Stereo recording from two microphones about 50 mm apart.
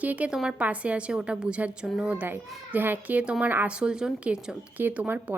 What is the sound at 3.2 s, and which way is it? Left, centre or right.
Speech, right.